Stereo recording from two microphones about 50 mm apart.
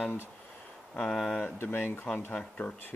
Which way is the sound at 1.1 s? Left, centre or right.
Centre.